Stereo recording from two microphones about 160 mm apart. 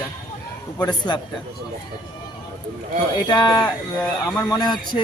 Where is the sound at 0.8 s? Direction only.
25° left (ahead or behind).